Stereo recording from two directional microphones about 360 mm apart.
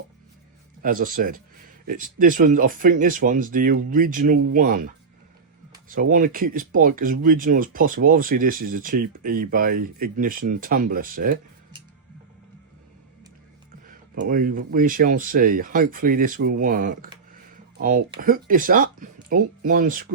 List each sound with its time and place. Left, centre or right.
0.8 s speech: right
5.9 s speech: right
14.3 s speech: right